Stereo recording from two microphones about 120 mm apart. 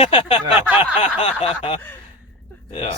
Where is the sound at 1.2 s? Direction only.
55° left (ahead or behind).